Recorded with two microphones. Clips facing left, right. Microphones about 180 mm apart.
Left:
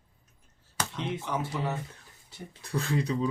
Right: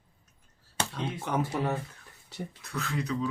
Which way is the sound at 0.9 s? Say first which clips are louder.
Right 1 dB; 55° right (ahead or behind).